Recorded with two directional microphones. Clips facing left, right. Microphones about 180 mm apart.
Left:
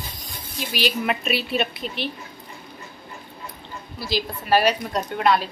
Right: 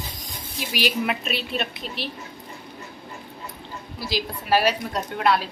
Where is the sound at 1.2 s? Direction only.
5° left (ahead or behind).